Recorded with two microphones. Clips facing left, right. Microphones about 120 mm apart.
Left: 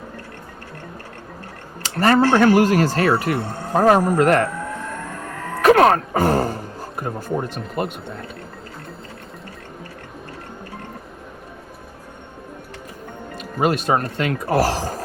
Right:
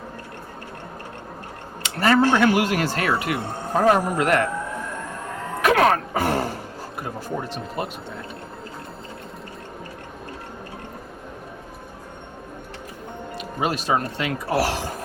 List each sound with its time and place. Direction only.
1.8 s a sound: 40° left (ahead or behind)
2.3 s speech: 45° left (ahead or behind)
5.6 s speech: 40° left (ahead or behind)
13.3 s speech: 45° left (ahead or behind)